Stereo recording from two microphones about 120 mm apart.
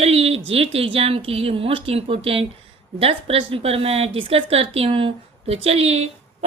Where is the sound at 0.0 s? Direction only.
55° right (ahead or behind).